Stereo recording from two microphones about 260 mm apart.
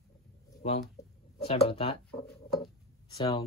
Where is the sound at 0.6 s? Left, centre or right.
Left.